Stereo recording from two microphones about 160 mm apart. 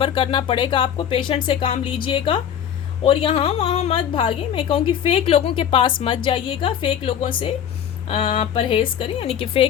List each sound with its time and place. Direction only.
0.0 s a woman's voice: 30° left (ahead or behind)